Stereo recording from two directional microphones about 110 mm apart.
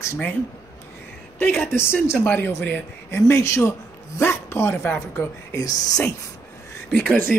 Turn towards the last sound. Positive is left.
turn(degrees=5)  # may be behind; listen again after turning